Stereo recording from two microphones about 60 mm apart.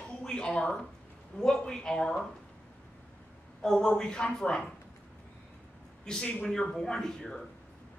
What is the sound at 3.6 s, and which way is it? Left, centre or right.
Speech, centre.